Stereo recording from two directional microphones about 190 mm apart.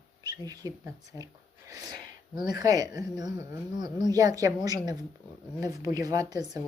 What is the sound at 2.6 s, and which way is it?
A woman's voice, 20° right (ahead or behind).